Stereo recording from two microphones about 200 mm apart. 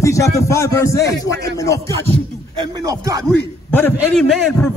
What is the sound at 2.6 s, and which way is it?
Speech, 20° right (ahead or behind).